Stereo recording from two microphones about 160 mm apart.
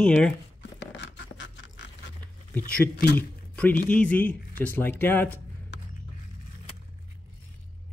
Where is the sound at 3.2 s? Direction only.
10° left (ahead or behind).